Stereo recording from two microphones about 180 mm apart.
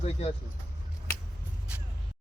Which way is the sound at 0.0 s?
35° left (ahead or behind).